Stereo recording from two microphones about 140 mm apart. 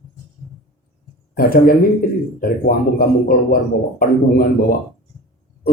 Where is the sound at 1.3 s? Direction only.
90° left.